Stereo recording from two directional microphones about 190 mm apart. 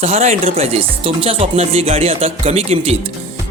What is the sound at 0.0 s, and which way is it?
Speech, 35° right (ahead or behind).